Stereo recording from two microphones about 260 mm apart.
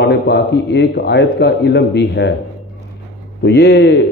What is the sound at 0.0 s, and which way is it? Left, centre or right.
A man's voice, left.